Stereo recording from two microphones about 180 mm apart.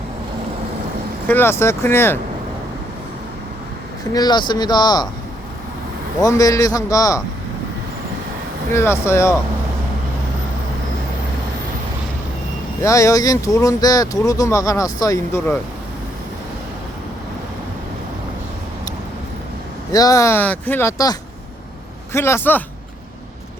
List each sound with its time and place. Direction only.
1.3 s speech: 15° left (ahead or behind)
4.1 s speech: 25° left (ahead or behind)
6.1 s speech: 20° left (ahead or behind)
8.7 s speech: 15° left (ahead or behind)
12.8 s speech: 15° left (ahead or behind)
19.9 s speech: 20° left (ahead or behind)